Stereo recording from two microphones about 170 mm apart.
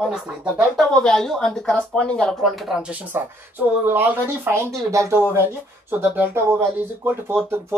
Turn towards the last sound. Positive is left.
turn(degrees=-15)  # may be behind; listen again after turning